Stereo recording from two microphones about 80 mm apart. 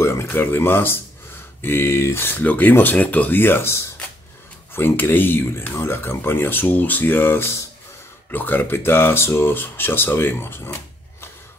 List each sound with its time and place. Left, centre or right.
0.0 s speech: left